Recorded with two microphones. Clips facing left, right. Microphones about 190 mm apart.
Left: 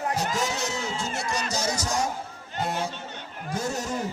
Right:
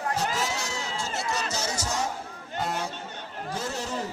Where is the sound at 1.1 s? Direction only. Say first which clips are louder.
Left 1 dB; 15° left (ahead or behind).